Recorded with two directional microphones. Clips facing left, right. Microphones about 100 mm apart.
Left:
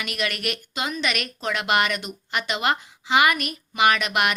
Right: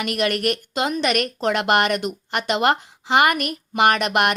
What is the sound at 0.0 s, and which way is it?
Speech, 50° right (ahead or behind).